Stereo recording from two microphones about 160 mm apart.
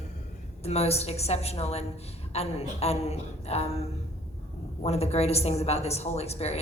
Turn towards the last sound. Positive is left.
turn(degrees=40)  # may be behind; listen again after turning